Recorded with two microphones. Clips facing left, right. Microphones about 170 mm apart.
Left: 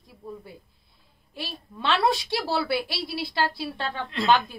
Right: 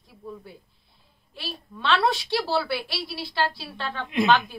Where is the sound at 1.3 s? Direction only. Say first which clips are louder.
Even; 45° left (ahead or behind).